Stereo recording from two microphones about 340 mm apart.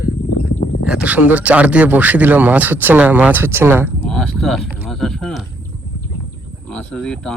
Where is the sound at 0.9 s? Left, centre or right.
Centre.